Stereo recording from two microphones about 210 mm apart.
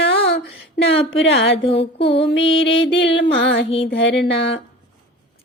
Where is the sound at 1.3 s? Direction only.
25° left (ahead or behind).